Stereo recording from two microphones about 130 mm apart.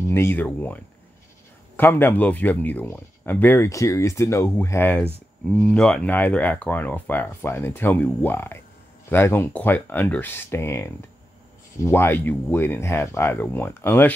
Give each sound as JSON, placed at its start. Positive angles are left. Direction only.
{"t": 0.0, "sound": "speech", "side_deg": 20}